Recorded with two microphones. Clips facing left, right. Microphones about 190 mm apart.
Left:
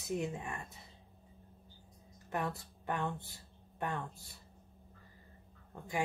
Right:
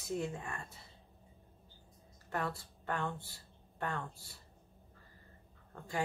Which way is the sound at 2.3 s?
15° left (ahead or behind).